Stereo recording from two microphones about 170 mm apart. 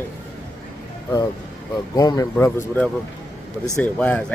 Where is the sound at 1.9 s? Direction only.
20° left (ahead or behind).